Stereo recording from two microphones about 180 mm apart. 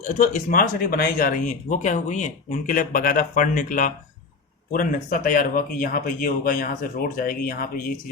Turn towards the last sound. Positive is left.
turn(degrees=55)  # may be behind; listen again after turning